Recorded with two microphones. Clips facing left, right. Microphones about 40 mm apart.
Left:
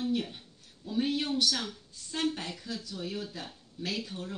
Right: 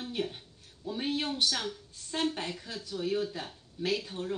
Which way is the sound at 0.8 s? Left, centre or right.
Right.